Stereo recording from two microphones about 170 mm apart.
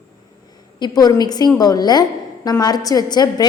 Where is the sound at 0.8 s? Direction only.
20° left (ahead or behind).